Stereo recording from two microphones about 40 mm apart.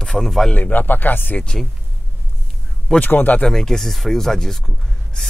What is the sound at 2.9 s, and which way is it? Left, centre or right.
Speech, left.